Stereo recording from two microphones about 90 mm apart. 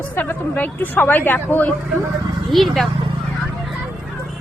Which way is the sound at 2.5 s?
Centre (ahead or behind).